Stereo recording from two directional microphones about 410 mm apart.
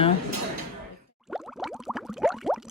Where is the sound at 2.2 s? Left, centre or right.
Centre.